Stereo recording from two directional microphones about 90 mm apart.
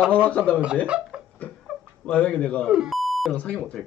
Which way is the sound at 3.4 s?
10° left (ahead or behind).